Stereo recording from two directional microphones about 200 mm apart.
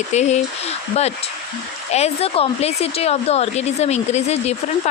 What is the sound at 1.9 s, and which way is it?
A woman's voice, 30° left (ahead or behind).